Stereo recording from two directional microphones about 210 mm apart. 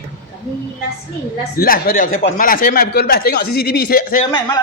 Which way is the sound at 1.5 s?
45° left (ahead or behind).